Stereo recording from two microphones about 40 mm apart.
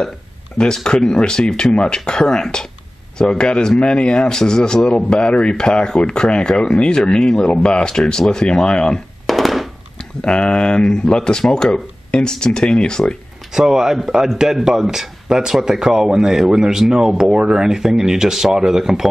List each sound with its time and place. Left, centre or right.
0.8 s speech: centre
9.2 s a sound: centre
10.2 s speech: left
13.5 s speech: centre